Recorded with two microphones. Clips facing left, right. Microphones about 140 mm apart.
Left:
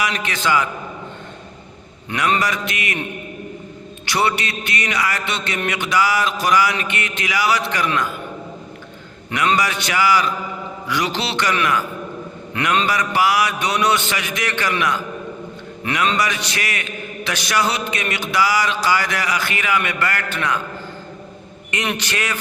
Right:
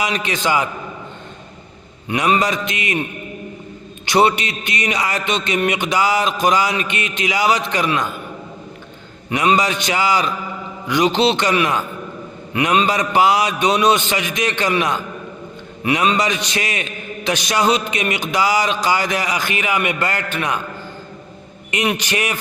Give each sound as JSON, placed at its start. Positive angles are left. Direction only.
{"t": 0.0, "sound": "a man's voice", "side_deg": -20}
{"t": 2.0, "sound": "a man's voice", "side_deg": -15}
{"t": 4.0, "sound": "a man's voice", "side_deg": -20}
{"t": 9.3, "sound": "a man's voice", "side_deg": -20}
{"t": 21.7, "sound": "a man's voice", "side_deg": -15}